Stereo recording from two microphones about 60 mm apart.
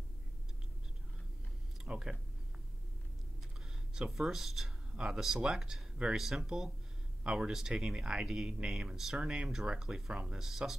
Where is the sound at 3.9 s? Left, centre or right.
Centre.